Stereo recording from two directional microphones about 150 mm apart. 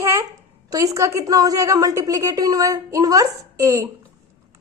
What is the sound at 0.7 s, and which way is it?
A woman's voice, 20° right (ahead or behind).